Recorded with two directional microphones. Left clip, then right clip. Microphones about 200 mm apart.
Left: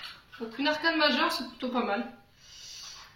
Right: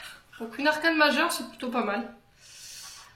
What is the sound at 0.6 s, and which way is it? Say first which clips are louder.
Speech: right 3 dB; 50° right (ahead or behind).